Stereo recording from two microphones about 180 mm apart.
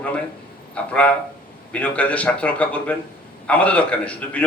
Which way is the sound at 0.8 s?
5° left (ahead or behind).